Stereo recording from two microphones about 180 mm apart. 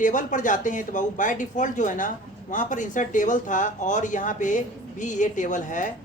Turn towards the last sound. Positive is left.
turn(degrees=45)  # may be behind; listen again after turning